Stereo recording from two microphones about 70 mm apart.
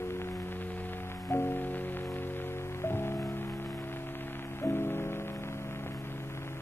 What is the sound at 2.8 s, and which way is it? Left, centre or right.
Music, left.